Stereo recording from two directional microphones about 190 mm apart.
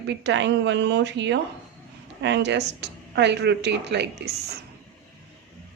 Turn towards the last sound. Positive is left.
turn(degrees=-60)  # may be behind; listen again after turning